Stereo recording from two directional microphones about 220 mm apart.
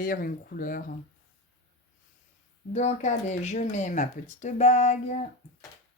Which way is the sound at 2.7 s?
30° left (ahead or behind).